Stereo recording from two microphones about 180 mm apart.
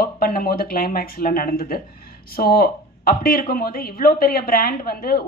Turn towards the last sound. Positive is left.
turn(degrees=55)  # may be behind; listen again after turning